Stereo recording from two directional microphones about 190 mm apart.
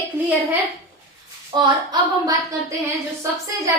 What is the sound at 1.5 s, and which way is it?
Speech, 25° right (ahead or behind).